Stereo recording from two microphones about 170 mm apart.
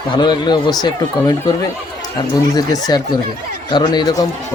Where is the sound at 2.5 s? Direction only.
25° left (ahead or behind).